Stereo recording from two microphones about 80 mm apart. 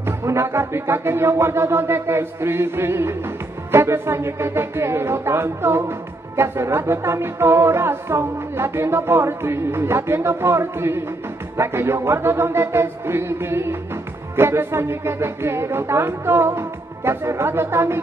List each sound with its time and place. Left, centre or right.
0.0 s speech: right